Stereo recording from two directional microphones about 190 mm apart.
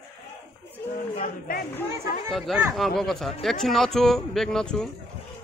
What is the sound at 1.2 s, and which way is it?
Speech, 50° left (ahead or behind).